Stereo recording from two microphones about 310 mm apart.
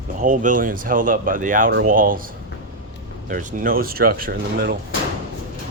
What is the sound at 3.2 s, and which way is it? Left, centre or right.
Speech, right.